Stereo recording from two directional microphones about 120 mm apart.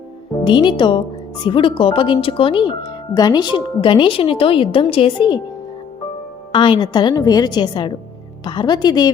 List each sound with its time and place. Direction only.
0.4 s a woman's voice: 40° left (ahead or behind)
6.5 s a woman's voice: 45° left (ahead or behind)